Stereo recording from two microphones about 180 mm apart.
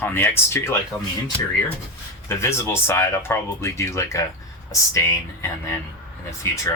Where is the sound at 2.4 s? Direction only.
15° left (ahead or behind).